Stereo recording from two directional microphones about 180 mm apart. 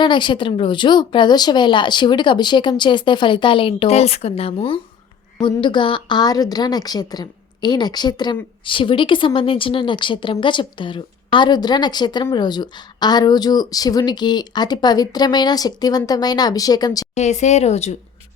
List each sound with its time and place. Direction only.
0.0 s a woman's voice: 25° left (ahead or behind)
17.2 s speech: 40° left (ahead or behind)